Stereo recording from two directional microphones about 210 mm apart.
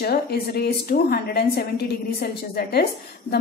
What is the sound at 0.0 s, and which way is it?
A woman's voice, 45° left (ahead or behind).